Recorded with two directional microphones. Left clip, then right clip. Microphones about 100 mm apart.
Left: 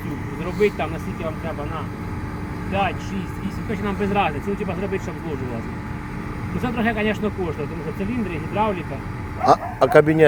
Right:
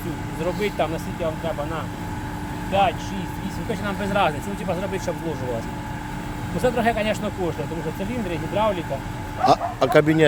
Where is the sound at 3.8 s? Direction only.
50° right (ahead or behind).